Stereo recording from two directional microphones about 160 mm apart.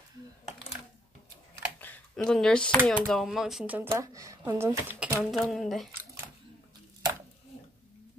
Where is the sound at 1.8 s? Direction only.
10° left (ahead or behind).